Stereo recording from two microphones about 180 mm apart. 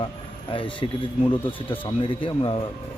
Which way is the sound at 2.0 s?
30° left (ahead or behind).